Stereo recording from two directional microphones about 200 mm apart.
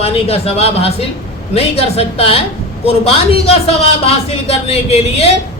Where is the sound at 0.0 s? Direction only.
30° left (ahead or behind).